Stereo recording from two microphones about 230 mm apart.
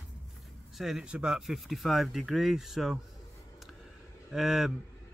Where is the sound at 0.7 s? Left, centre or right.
Centre.